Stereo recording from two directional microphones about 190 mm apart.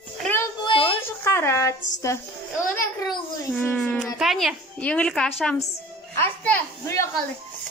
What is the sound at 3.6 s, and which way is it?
A child's voice, 10° left (ahead or behind).